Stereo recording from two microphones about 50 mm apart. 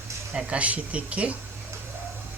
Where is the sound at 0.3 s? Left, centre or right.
Right.